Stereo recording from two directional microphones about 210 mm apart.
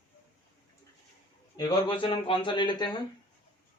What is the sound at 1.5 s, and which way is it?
Speech, 25° left (ahead or behind).